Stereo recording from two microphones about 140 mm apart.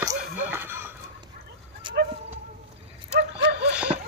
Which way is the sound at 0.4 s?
15° right (ahead or behind).